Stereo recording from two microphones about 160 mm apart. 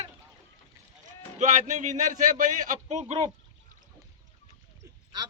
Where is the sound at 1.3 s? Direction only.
50° right (ahead or behind).